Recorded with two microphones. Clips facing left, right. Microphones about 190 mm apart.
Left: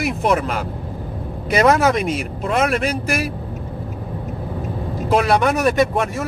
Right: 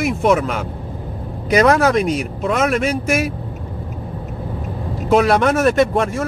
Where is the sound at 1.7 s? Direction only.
20° left (ahead or behind).